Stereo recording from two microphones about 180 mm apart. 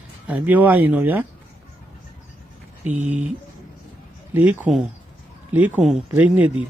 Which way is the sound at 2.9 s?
45° right (ahead or behind).